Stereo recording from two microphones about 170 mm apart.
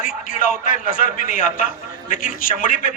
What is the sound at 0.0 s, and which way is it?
A man's voice, 55° left (ahead or behind).